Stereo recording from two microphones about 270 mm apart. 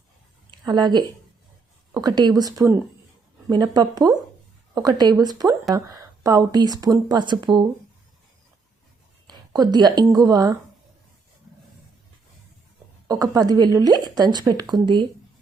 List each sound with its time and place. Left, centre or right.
0.6 s a woman's voice: centre
9.2 s speech: centre
13.1 s a woman's voice: centre